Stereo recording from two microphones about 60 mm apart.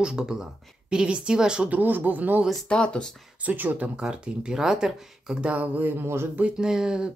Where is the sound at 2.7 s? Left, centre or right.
Centre.